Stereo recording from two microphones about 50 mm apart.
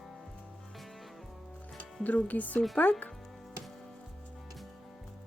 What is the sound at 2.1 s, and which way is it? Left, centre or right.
Speech, left.